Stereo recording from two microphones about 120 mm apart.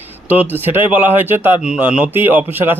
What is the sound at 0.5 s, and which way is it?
A man's voice, 15° right (ahead or behind).